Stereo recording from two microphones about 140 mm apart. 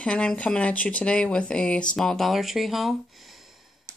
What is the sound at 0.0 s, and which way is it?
Speech, 5° left (ahead or behind).